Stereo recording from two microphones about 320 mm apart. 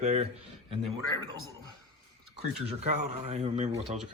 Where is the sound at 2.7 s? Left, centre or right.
Centre.